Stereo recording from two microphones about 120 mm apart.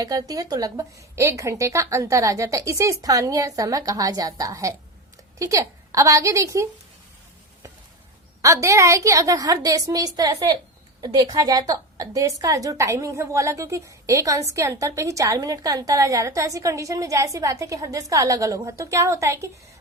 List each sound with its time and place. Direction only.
0.0 s a woman's voice: 30° right (ahead or behind)
8.4 s a woman's voice: 25° right (ahead or behind)